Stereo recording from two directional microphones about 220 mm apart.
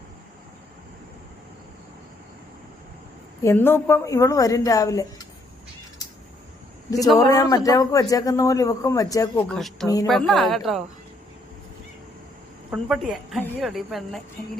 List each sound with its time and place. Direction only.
3.4 s a man's voice: 10° left (ahead or behind)
7.2 s a man's voice: 15° left (ahead or behind)
9.5 s a woman's voice: centre (ahead or behind)
9.8 s a man's voice: 15° left (ahead or behind)
10.1 s a woman's voice: centre (ahead or behind)
12.7 s a woman's voice: centre (ahead or behind)